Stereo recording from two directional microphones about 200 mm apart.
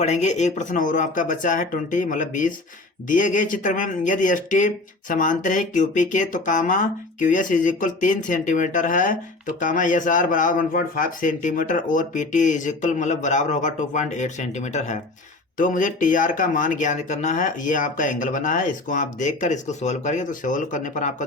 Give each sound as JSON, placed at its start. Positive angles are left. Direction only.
{"t": 0.0, "sound": "speech", "side_deg": 35}